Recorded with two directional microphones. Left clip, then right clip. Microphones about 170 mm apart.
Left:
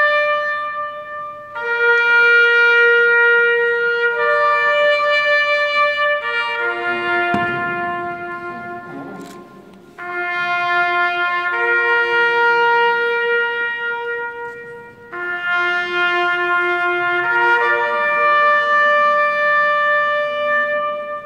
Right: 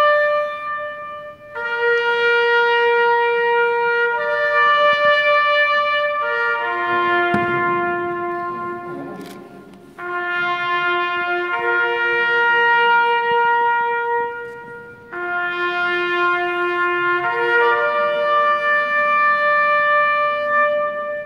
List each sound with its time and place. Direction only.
0.0 s music: 20° right (ahead or behind)
1.6 s shofar: 15° right (ahead or behind)
3.9 s trumpet: centre (ahead or behind); by 7.2 s 20° left (ahead or behind)
10.1 s music: 45° left (ahead or behind)
15.2 s music: 65° left (ahead or behind)